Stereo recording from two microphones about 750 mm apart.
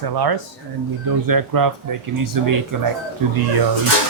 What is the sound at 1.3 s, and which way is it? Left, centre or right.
Speech, right.